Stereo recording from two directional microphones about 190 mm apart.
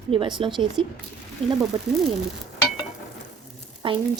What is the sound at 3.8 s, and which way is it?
Frying, 25° right (ahead or behind).